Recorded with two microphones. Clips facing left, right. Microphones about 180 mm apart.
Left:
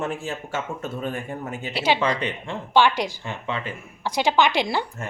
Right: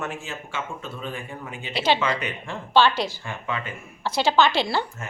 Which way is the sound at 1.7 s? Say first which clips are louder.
Even; 10° left (ahead or behind).